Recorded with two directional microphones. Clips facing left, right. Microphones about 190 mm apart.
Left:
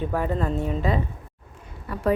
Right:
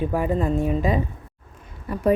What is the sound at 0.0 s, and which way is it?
A woman's voice, 10° right (ahead or behind).